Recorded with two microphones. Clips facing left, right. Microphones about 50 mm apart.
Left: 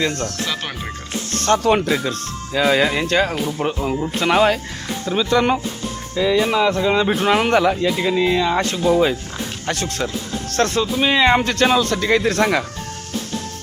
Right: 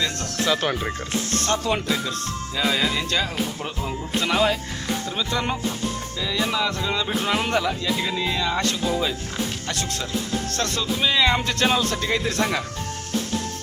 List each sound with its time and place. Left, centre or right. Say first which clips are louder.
0.2 s speech: right 1 dB; centre
1.5 s speech: left 9 dB; left
4.2 s speech: left 5 dB; left
5.0 s speech: left 12 dB; left
6.3 s speech: left 6 dB; left
7.3 s speech: left 7 dB; left
7.8 s speech: left 7 dB; left
8.9 s speech: left 13 dB; left
9.7 s speech: left 3 dB; left
11.4 s speech: left 5 dB; left